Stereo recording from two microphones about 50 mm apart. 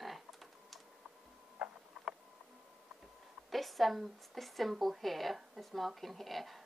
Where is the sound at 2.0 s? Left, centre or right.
Centre.